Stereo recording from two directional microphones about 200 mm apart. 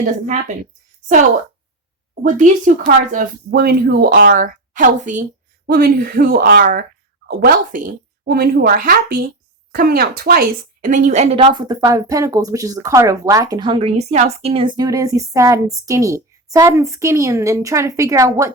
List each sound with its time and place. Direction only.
0.0 s a woman's voice: 40° right (ahead or behind)
2.2 s speech: 40° right (ahead or behind); by 18.5 s 15° right (ahead or behind)